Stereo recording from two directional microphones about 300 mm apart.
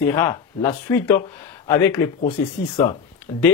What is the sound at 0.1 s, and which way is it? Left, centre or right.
Speech, centre.